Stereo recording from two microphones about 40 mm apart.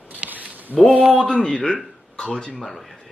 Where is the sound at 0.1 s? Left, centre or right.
Right.